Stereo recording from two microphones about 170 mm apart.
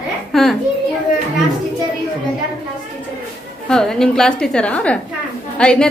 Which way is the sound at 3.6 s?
5° left (ahead or behind).